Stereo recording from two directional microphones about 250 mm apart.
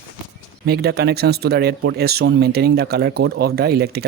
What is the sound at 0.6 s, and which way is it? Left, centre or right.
Speech, right.